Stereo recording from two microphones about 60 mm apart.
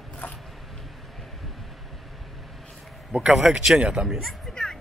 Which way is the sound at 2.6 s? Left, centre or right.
Centre.